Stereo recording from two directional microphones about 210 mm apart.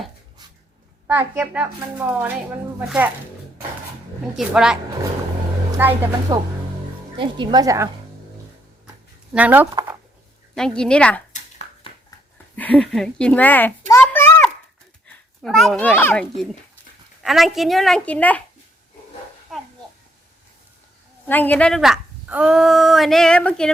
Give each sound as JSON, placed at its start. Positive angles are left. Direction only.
{"t": 1.2, "sound": "speech", "side_deg": -10}
{"t": 4.4, "sound": "a woman's voice", "side_deg": -5}
{"t": 5.8, "sound": "speech", "side_deg": -10}
{"t": 6.3, "sound": "speech", "side_deg": -20}
{"t": 9.3, "sound": "speech", "side_deg": -5}
{"t": 9.7, "sound": "a sound", "side_deg": -15}
{"t": 10.5, "sound": "a woman's voice", "side_deg": 5}
{"t": 11.3, "sound": "a sound", "side_deg": 35}
{"t": 12.5, "sound": "a child's voice", "side_deg": 5}
{"t": 15.4, "sound": "a woman's voice", "side_deg": 0}
{"t": 21.2, "sound": "a woman's voice", "side_deg": 10}